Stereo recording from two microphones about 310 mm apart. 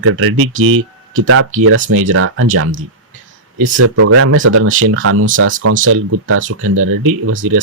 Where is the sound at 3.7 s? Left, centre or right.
Right.